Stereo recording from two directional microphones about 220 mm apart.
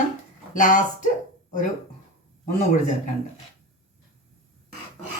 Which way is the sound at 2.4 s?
35° left (ahead or behind).